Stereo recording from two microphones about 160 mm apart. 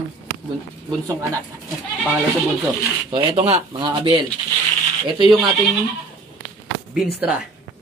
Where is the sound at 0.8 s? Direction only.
20° right (ahead or behind).